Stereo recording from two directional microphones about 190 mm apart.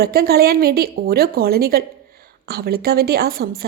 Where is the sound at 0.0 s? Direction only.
55° right (ahead or behind).